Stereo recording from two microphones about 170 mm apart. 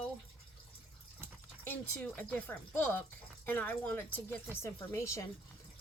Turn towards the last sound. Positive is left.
turn(degrees=20)  # may be behind; listen again after turning